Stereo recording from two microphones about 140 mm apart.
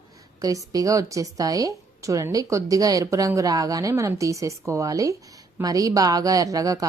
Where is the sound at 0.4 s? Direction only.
25° right (ahead or behind).